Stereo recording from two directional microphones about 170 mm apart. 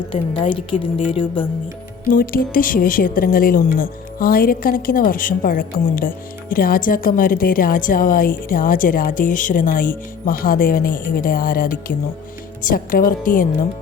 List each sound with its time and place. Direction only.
0.1 s a woman's voice: 30° left (ahead or behind)
2.0 s speech: 55° left (ahead or behind)